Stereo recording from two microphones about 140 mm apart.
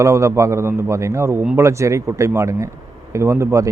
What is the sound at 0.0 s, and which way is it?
Speech, 20° right (ahead or behind).